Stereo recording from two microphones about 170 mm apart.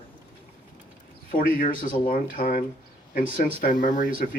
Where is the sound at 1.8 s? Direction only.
55° left (ahead or behind).